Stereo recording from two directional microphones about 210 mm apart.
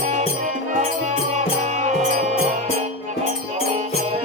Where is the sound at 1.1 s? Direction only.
35° right (ahead or behind).